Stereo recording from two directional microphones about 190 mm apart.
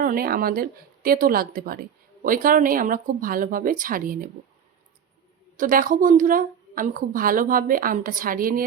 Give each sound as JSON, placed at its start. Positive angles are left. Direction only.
{"t": 0.0, "sound": "a woman's voice", "side_deg": -50}
{"t": 5.5, "sound": "a woman's voice", "side_deg": -45}